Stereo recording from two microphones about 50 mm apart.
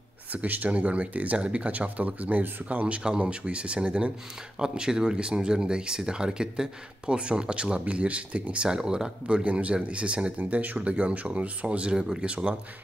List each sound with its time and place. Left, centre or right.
0.3 s speech: right
3.2 s speech: right
8.6 s speech: centre
9.4 s speech: right
10.4 s speech: right